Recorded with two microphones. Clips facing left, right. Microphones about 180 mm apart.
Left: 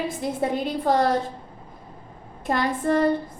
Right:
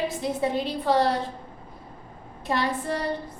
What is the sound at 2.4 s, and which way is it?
Speech, 50° left (ahead or behind).